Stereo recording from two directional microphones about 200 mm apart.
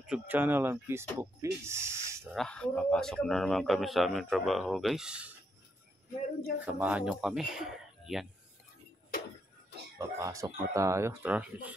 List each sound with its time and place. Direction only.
0.0 s speech: 5° right (ahead or behind)
2.3 s speech: 5° left (ahead or behind)
6.6 s speech: 10° right (ahead or behind)
9.9 s speech: 15° right (ahead or behind)